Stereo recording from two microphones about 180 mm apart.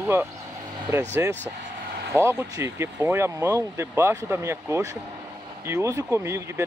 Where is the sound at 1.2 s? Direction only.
15° right (ahead or behind).